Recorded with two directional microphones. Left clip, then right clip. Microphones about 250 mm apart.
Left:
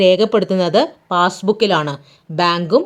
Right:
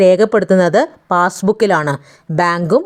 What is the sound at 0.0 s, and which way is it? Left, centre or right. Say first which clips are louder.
Speech: right 2 dB; right.